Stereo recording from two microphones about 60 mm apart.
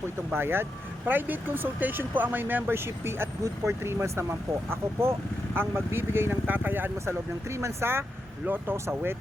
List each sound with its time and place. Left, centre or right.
0.3 s speech: right
7.0 s speech: right